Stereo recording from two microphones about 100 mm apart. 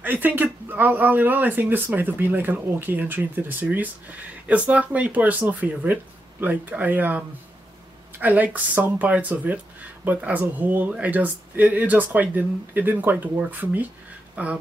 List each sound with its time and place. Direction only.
0.0 s speech: 15° right (ahead or behind)